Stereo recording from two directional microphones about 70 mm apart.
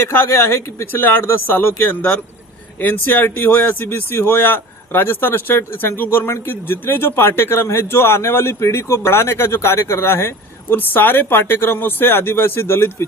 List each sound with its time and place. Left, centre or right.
0.0 s speech: left